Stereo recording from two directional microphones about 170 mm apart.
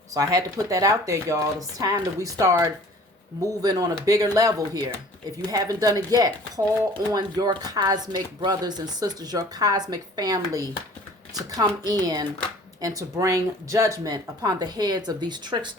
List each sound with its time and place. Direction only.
0.1 s speech: 20° right (ahead or behind)